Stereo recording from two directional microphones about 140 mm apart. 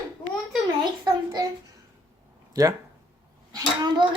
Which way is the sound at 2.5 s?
25° right (ahead or behind).